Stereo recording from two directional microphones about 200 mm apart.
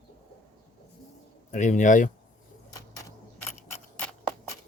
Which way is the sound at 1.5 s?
40° left (ahead or behind).